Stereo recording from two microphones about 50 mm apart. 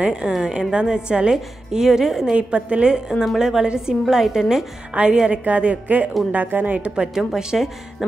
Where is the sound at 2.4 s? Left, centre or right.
Right.